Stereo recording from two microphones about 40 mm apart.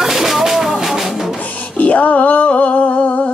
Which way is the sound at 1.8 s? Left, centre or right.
Left.